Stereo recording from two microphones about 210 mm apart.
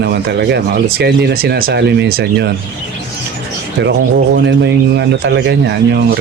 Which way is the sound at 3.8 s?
60° right (ahead or behind).